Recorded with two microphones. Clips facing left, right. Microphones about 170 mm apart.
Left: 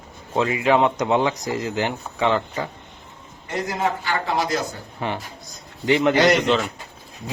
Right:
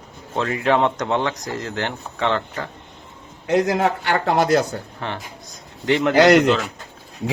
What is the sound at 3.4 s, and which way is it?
Speech, 80° right.